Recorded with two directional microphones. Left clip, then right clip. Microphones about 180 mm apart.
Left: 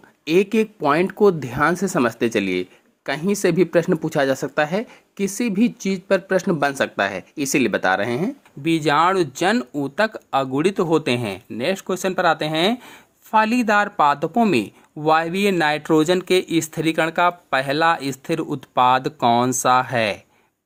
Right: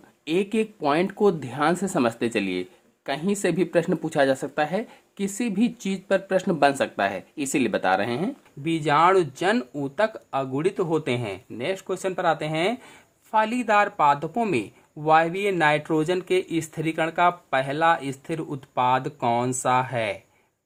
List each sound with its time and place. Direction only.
0.3 s speech: 15° left (ahead or behind); by 20.1 s 35° left (ahead or behind)